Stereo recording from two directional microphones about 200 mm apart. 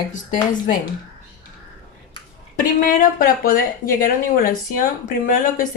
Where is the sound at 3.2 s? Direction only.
45° left (ahead or behind).